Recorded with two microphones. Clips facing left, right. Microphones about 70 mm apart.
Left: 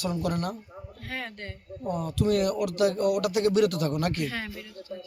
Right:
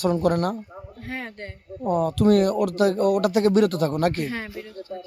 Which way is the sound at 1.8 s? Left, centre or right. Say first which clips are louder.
Right 8 dB; right.